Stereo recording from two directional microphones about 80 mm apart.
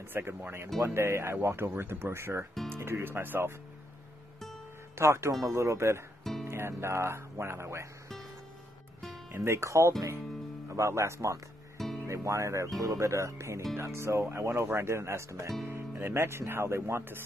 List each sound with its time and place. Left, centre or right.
0.1 s speech: right
2.5 s music: centre
2.8 s speech: right
4.9 s speech: right
9.3 s speech: right